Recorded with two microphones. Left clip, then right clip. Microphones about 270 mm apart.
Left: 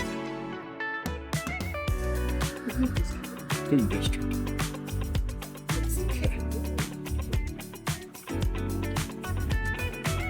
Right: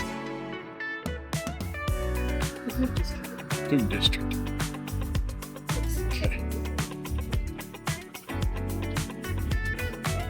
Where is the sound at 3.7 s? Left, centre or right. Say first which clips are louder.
Right 3 dB; centre.